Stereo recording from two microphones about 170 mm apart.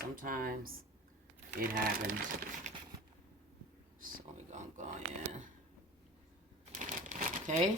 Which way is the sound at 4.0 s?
50° right (ahead or behind).